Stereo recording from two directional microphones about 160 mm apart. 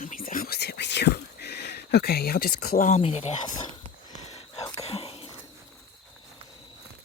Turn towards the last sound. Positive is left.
turn(degrees=35)  # may be behind; listen again after turning